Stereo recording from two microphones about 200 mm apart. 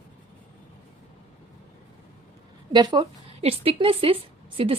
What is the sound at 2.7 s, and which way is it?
A woman's voice, 25° right (ahead or behind).